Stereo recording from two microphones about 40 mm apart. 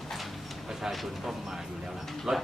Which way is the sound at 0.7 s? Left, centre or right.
Centre.